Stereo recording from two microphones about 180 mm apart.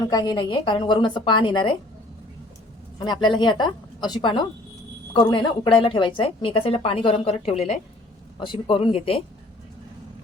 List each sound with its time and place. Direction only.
0.1 s a woman's voice: 25° left (ahead or behind)
3.0 s a woman's voice: 25° left (ahead or behind)